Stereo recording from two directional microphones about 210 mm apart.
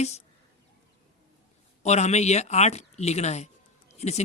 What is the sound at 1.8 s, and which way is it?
Speech, 30° left (ahead or behind).